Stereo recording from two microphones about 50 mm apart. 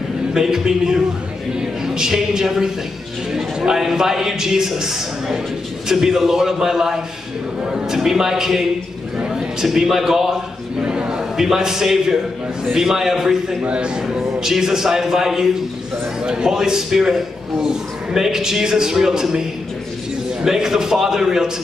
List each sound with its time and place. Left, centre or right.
0.3 s a man's voice: centre
10.8 s a sound: centre
12.7 s a man's voice: centre
13.6 s a man's voice: right
20.4 s a man's voice: centre